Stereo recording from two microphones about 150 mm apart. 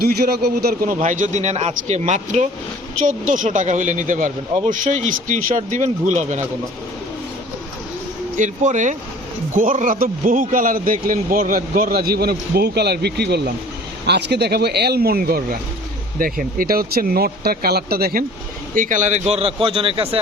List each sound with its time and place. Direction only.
0.0 s speech: 90° right
0.9 s speech: 55° right (ahead or behind)
8.4 s a man's voice: 55° right (ahead or behind); by 18.3 s 85° right
18.7 s speech: 60° right (ahead or behind); by 20.1 s 40° right (ahead or behind)